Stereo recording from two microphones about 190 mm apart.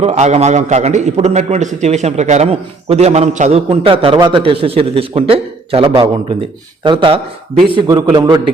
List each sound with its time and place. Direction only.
0.0 s a man's voice: 35° right (ahead or behind)